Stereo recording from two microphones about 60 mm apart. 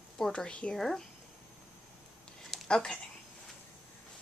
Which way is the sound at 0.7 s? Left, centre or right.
Centre.